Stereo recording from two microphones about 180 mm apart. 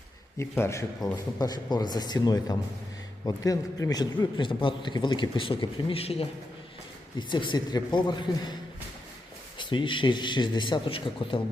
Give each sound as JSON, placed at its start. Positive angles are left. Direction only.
{"t": 0.3, "sound": "a man's voice", "side_deg": 15}
{"t": 9.6, "sound": "a man's voice", "side_deg": 25}